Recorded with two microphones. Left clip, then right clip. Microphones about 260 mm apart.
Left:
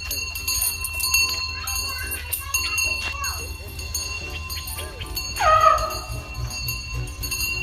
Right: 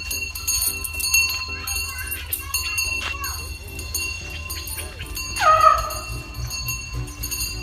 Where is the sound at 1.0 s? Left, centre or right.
Centre.